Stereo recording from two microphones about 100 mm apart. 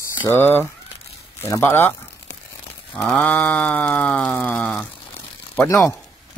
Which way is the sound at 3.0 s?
5° left (ahead or behind).